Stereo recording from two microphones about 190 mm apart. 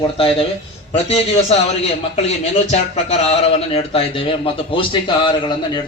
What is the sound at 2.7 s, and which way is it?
A man's voice, 35° left (ahead or behind).